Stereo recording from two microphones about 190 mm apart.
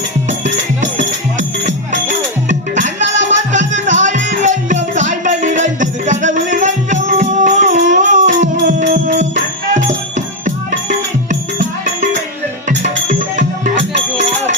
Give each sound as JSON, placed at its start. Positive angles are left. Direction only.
{"t": 0.9, "sound": "music", "side_deg": -40}
{"t": 12.6, "sound": "music", "side_deg": -40}